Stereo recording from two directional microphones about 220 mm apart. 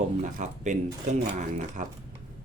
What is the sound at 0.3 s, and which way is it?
Speech, 35° right (ahead or behind).